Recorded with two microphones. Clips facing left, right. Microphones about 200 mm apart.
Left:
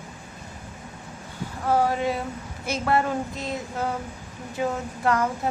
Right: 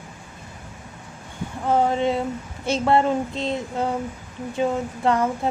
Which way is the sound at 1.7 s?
20° right (ahead or behind).